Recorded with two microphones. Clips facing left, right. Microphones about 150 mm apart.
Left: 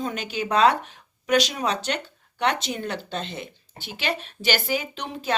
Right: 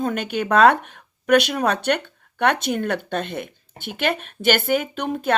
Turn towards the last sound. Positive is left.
turn(degrees=-50)  # may be behind; listen again after turning